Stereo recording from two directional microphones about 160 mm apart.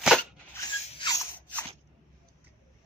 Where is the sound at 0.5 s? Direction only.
20° left (ahead or behind).